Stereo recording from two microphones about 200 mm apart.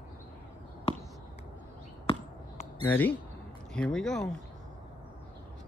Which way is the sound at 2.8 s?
10° left (ahead or behind).